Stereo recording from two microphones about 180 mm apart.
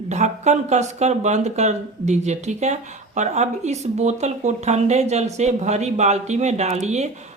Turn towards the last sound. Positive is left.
turn(degrees=-40)  # may be behind; listen again after turning